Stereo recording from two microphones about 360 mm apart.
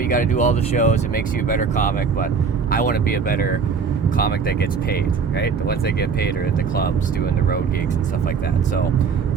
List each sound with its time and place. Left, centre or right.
0.1 s speech: left